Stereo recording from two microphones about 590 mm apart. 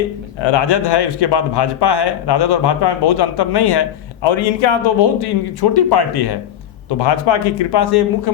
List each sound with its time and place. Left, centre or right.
0.4 s a man's voice: left